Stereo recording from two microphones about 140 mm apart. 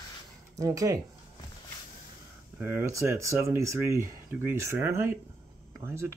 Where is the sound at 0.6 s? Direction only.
25° right (ahead or behind).